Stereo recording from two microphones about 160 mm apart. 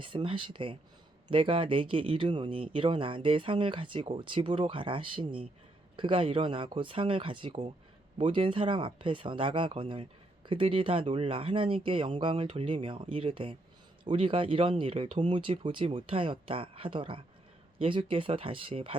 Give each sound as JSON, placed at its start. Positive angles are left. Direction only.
{"t": 0.0, "sound": "speech", "side_deg": -30}